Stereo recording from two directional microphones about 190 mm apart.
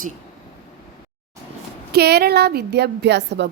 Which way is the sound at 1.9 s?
60° right (ahead or behind).